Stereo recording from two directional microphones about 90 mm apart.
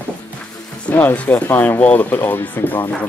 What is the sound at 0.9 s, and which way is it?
Speech, 20° left (ahead or behind).